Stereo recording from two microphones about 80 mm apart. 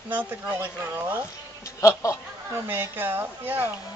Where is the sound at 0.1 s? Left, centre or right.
Right.